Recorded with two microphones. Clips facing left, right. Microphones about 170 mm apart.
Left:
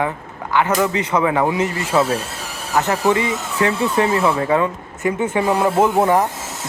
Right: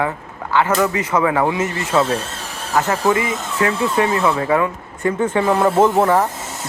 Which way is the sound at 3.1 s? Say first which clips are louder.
Even; 25° left (ahead or behind).